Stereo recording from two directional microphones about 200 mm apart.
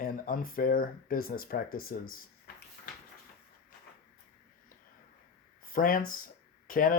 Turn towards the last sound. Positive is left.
turn(degrees=45)  # may be behind; listen again after turning